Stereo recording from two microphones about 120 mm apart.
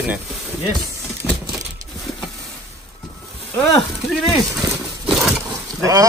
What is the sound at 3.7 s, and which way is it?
Speech, centre (ahead or behind).